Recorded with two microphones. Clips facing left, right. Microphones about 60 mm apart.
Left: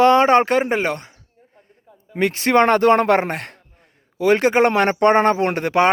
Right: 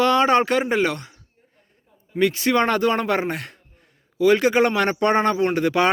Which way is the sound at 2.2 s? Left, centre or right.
Left.